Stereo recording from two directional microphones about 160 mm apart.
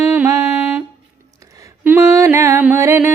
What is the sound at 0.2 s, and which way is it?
Music, 15° right (ahead or behind).